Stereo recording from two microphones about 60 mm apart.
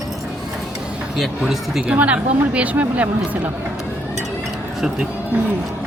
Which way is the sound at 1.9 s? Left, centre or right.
Right.